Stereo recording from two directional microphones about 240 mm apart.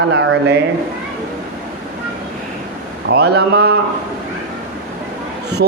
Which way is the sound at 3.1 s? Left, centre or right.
Right.